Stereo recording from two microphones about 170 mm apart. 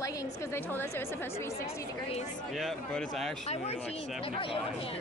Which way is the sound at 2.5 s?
Centre (ahead or behind).